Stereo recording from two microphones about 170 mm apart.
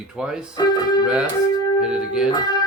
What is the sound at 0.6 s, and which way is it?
Music, 25° left (ahead or behind).